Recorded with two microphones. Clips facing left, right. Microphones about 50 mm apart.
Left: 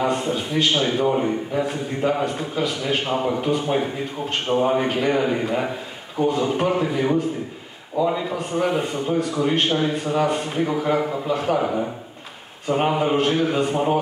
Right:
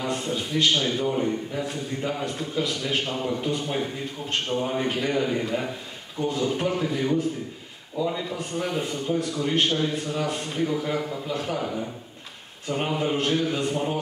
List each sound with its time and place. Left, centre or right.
0.0 s a man's voice: centre
6.1 s a man's voice: centre